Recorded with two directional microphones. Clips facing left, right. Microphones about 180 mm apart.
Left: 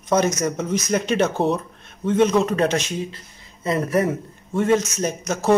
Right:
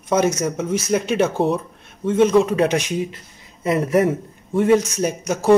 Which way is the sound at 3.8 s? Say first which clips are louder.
Right 4 dB; 25° right (ahead or behind).